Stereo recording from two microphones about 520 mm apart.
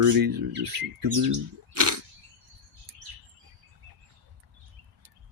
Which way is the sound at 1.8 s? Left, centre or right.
Right.